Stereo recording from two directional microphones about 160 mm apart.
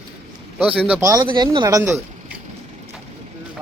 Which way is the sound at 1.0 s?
20° right (ahead or behind).